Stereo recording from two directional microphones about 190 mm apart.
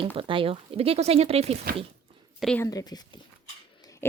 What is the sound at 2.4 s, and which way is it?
Speech, 5° left (ahead or behind).